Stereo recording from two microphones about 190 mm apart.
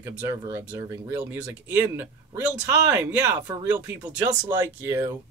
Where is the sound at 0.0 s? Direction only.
15° right (ahead or behind).